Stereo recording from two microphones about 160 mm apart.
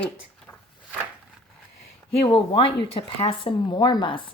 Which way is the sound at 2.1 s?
35° left (ahead or behind).